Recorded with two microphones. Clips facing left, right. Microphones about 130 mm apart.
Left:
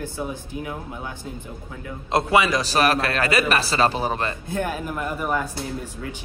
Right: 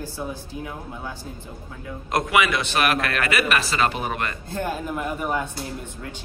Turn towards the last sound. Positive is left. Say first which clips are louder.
# left 1 dB
turn(degrees=0)  # may be behind; listen again after turning